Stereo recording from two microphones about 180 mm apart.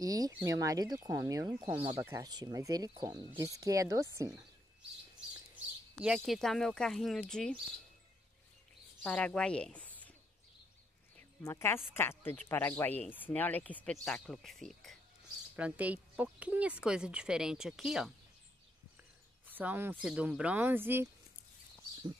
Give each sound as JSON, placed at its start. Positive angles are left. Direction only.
{"t": 0.0, "sound": "speech", "side_deg": -20}
{"t": 5.9, "sound": "speech", "side_deg": -5}
{"t": 9.0, "sound": "speech", "side_deg": 5}
{"t": 11.1, "sound": "speech", "side_deg": 15}
{"t": 19.4, "sound": "speech", "side_deg": -10}